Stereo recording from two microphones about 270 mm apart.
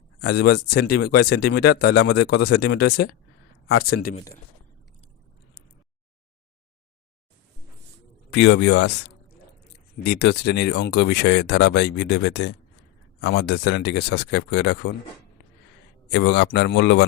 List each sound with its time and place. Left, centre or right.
0.2 s speech: left
8.3 s speech: left
16.0 s speech: left